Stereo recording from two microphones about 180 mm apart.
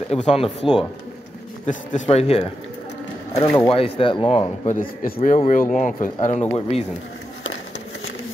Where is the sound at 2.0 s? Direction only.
35° left (ahead or behind).